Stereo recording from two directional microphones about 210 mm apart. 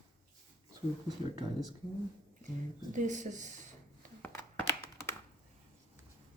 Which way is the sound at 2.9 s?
35° right (ahead or behind).